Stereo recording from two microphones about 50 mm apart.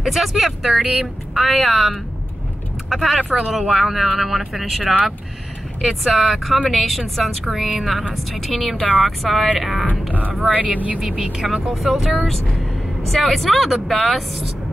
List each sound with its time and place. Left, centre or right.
0.0 s speech: centre
3.2 s speech: right
3.5 s speech: centre
10.5 s speech: right
11.0 s speech: centre